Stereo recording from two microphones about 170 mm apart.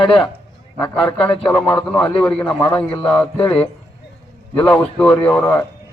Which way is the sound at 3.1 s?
10° left (ahead or behind).